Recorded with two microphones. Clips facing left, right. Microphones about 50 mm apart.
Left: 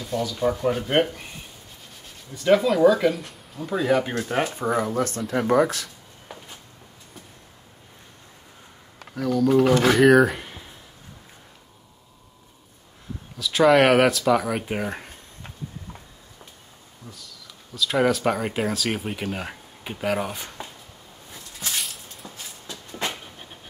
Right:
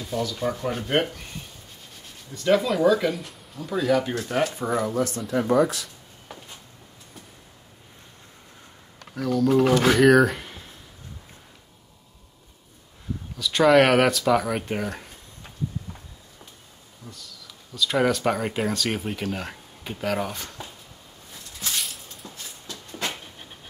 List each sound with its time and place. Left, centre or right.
0.0 s speech: centre
2.3 s speech: centre
3.8 s speech: left
9.1 s speech: centre
13.4 s speech: centre
17.1 s speech: centre
21.6 s a sound: centre
22.2 s a sound: left